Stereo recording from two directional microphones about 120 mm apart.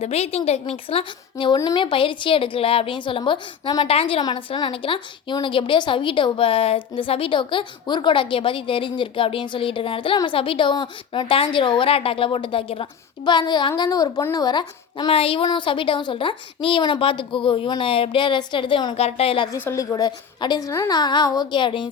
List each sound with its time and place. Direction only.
0.0 s a woman's voice: 60° left (ahead or behind); by 3.8 s 40° left (ahead or behind)
3.8 s a woman's voice: 50° left (ahead or behind)
15.1 s a woman's voice: 50° left (ahead or behind)
18.9 s a woman's voice: 60° left (ahead or behind)
19.6 s a woman's voice: 25° left (ahead or behind); by 21.8 s 45° left (ahead or behind)